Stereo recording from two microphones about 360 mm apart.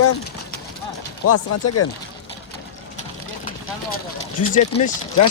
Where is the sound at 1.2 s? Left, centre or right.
Left.